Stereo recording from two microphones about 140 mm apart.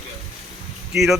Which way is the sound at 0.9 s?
Centre (ahead or behind).